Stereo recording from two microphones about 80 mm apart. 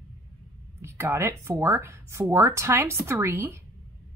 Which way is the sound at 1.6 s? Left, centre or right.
Right.